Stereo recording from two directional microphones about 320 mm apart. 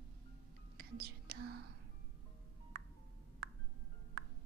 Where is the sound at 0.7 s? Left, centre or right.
Right.